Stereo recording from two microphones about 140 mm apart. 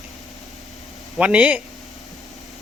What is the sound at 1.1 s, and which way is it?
Speech, 10° right (ahead or behind).